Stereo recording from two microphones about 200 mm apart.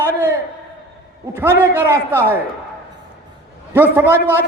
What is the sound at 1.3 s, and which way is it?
A man's voice, 10° right (ahead or behind).